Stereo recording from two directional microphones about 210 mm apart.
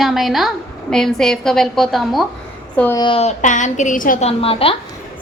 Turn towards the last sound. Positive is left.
turn(degrees=25)  # may be behind; listen again after turning